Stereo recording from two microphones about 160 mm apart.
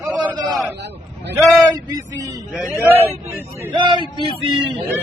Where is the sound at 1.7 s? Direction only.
25° right (ahead or behind).